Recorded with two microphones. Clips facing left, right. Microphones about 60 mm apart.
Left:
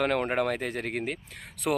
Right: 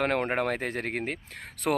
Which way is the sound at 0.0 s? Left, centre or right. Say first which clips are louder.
Left 1 dB; right.